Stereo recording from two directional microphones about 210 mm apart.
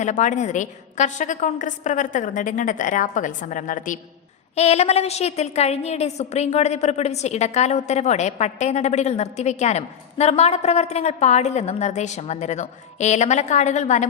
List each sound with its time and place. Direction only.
0.0 s a woman's voice: 35° left (ahead or behind)